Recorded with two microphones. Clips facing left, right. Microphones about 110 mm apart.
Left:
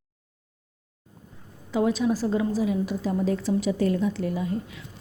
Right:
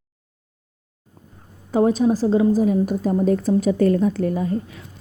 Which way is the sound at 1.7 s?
40° right (ahead or behind).